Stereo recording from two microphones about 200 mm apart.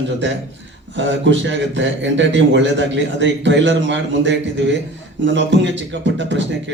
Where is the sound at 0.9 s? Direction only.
65° right (ahead or behind).